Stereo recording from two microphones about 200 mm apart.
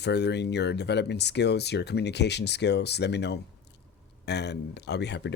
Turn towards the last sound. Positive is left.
turn(degrees=60)  # may be behind; listen again after turning